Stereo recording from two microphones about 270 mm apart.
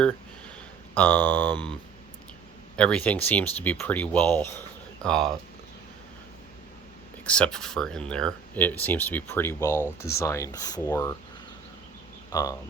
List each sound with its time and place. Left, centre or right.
0.9 s speech: centre
2.7 s speech: centre
7.3 s speech: centre
12.3 s speech: centre